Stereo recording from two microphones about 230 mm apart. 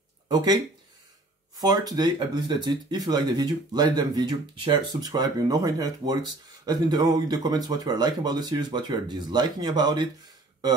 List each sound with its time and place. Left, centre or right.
0.3 s speech: centre
1.6 s speech: centre